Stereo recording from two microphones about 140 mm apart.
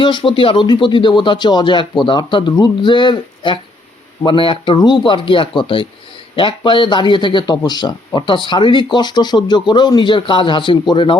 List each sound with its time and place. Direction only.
0.0 s speech: 35° left (ahead or behind)